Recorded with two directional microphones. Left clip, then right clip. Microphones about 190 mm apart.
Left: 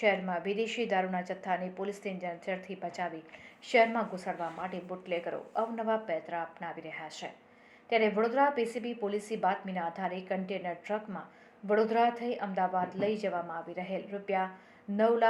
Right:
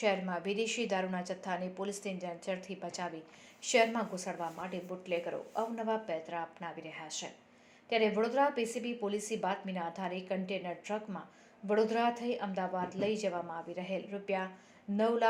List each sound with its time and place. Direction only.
0.0 s a woman's voice: 30° right (ahead or behind)
4.3 s a woman's voice: 30° right (ahead or behind)